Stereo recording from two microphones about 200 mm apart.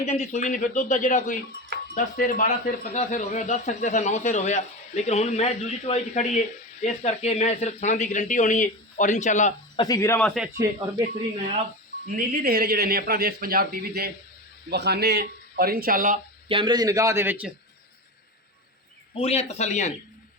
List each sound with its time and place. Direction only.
0.0 s speech: 35° left (ahead or behind)
9.7 s speech: 20° left (ahead or behind); by 10.5 s centre (ahead or behind)
12.1 s a man's voice: 50° right (ahead or behind)
16.5 s a man's voice: 25° right (ahead or behind); by 17.5 s 10° right (ahead or behind)
19.1 s speech: 30° left (ahead or behind)